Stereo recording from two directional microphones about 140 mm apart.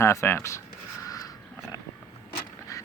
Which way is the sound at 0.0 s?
20° left (ahead or behind).